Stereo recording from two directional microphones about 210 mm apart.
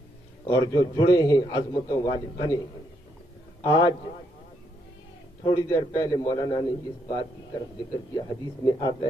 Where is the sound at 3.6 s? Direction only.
20° left (ahead or behind).